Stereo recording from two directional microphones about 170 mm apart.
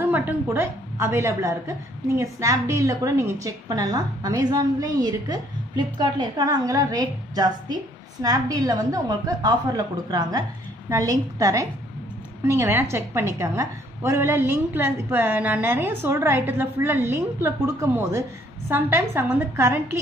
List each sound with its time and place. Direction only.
0.0 s a woman's voice: 10° right (ahead or behind)